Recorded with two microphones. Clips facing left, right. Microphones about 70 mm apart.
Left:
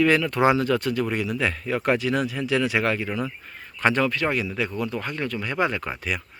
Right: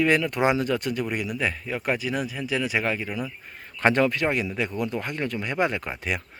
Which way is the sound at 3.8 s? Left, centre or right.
Right.